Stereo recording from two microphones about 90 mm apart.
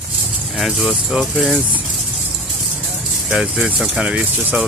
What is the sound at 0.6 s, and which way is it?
Speech, centre (ahead or behind).